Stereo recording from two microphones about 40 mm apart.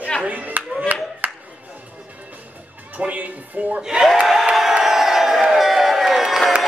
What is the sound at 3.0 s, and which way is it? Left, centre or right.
Speech, right.